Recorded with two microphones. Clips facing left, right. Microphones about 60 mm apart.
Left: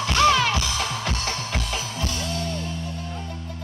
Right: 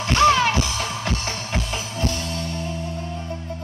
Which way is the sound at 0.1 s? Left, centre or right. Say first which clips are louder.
Right 3 dB; right.